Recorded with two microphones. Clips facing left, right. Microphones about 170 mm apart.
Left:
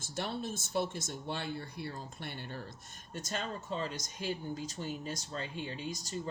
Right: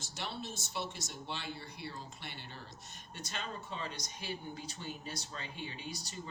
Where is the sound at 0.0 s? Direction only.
50° left (ahead or behind).